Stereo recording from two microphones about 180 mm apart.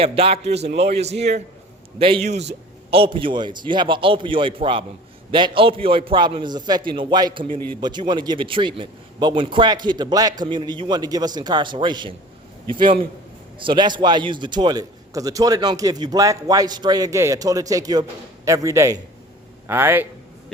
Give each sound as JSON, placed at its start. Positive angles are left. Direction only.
{"t": 0.0, "sound": "a man's voice", "side_deg": -30}